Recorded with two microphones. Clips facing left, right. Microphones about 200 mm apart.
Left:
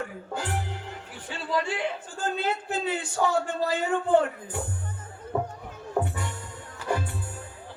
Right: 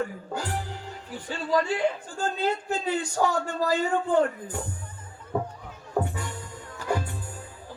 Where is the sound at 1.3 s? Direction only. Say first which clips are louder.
Right 3 dB; 40° right (ahead or behind).